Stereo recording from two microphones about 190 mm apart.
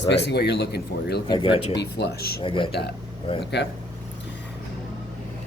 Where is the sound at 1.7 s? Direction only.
60° left (ahead or behind).